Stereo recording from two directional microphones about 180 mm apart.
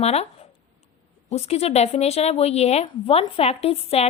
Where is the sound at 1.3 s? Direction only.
35° left (ahead or behind).